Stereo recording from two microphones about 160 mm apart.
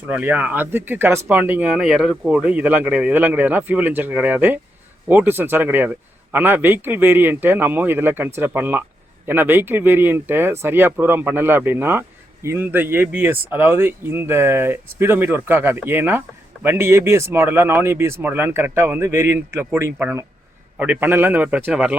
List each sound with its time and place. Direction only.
0.1 s speech: 10° right (ahead or behind)